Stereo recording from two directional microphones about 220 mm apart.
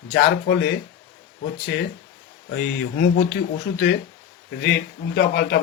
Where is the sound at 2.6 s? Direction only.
55° left (ahead or behind).